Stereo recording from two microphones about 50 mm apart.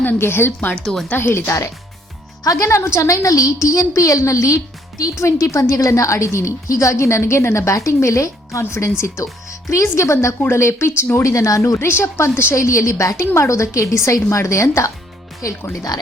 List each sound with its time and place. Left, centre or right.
0.2 s speech: left
2.6 s a woman's voice: left
11.2 s a woman's voice: left
11.9 s speech: left
12.5 s a woman's voice: left